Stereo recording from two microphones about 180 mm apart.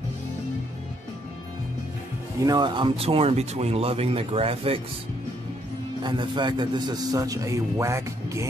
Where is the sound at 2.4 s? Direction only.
25° right (ahead or behind).